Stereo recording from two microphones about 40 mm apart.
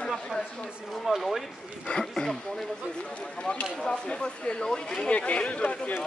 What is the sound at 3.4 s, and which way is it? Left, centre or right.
Speech, left.